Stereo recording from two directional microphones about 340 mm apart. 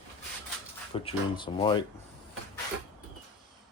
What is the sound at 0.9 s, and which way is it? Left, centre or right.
Speech, centre.